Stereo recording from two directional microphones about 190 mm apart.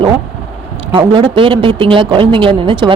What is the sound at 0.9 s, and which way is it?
A woman's voice, 25° right (ahead or behind).